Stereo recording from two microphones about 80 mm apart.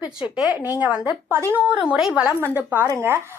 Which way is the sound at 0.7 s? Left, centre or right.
Centre.